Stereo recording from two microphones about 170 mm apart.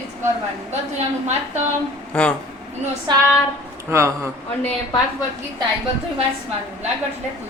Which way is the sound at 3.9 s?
15° right (ahead or behind).